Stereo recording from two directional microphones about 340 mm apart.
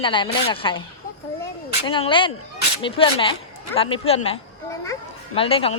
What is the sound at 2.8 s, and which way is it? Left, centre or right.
A child's voice, centre.